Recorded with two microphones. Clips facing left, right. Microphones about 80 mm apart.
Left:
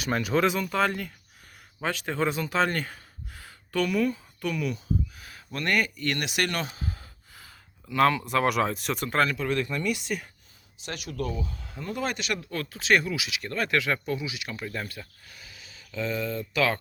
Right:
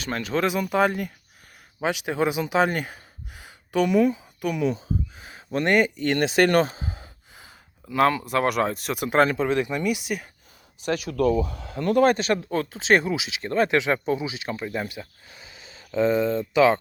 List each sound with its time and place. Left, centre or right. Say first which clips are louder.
0.0 s speech: left 1 dB; centre
0.6 s speech: right 4 dB; centre; by 6.7 s right
6.7 s gasp: right 1 dB; right
7.9 s speech: right 2 dB; centre
9.0 s speech: right 6 dB; right; by 10.2 s centre
11.1 s speech: right 10 dB; right
12.0 s speech: right 10 dB; right
14.6 s speech: right 5 dB; centre